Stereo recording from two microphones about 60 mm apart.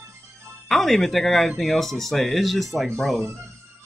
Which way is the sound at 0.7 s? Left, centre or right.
Centre.